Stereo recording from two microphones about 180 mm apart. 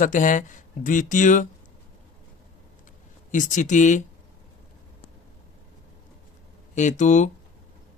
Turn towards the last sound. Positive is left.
turn(degrees=40)  # may be behind; listen again after turning